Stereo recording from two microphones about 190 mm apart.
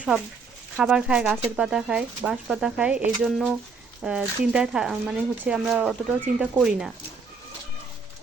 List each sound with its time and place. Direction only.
0.8 s speech: 5° right (ahead or behind)